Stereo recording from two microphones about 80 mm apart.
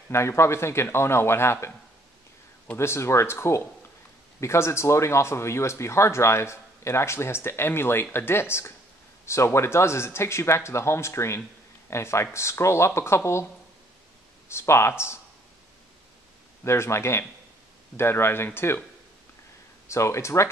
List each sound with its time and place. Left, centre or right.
0.1 s speech: left
2.7 s speech: left
14.5 s speech: left
16.6 s speech: left
19.9 s speech: left